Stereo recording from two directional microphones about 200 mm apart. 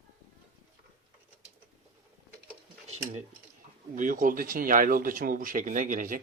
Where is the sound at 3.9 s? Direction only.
40° right (ahead or behind).